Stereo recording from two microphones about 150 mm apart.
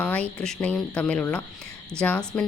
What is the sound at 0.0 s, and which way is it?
Speech, 10° left (ahead or behind).